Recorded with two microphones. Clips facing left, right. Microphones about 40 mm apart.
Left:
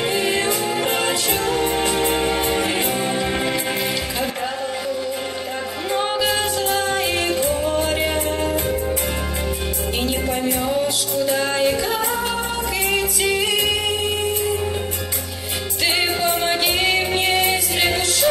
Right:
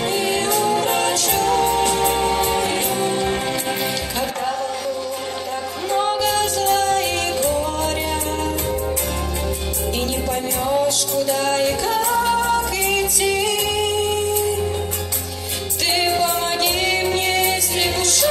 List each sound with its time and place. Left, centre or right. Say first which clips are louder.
0.1 s music: even; centre
5.9 s music: right 1 dB; centre
11.2 s music: left 1 dB; centre
16.0 s music: right 3 dB; centre